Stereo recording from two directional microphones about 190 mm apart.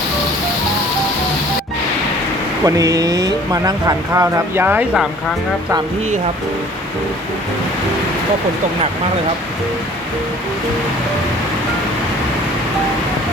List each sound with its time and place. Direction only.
2.6 s speech: 20° right (ahead or behind)